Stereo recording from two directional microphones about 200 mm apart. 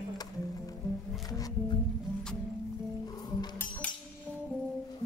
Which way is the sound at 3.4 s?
10° left (ahead or behind).